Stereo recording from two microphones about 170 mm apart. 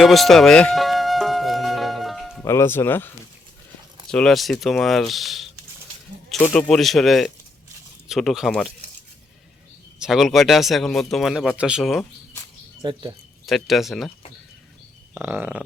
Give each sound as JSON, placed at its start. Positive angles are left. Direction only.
{"t": 0.0, "sound": "music", "side_deg": 0}
{"t": 2.4, "sound": "speech", "side_deg": 15}
{"t": 4.1, "sound": "speech", "side_deg": 5}
{"t": 10.0, "sound": "speech", "side_deg": 0}
{"t": 12.8, "sound": "speech", "side_deg": -25}
{"t": 13.4, "sound": "speech", "side_deg": 0}
{"t": 15.1, "sound": "a sound", "side_deg": -10}